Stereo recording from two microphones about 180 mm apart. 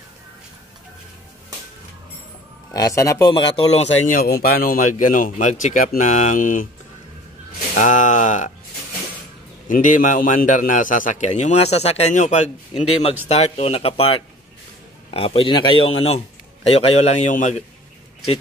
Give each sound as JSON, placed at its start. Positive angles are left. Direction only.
{"t": 2.7, "sound": "speech", "side_deg": 20}
{"t": 4.2, "sound": "a man's voice", "side_deg": 55}
{"t": 7.7, "sound": "a man's voice", "side_deg": 45}
{"t": 9.7, "sound": "a man's voice", "side_deg": 45}
{"t": 15.1, "sound": "speech", "side_deg": 30}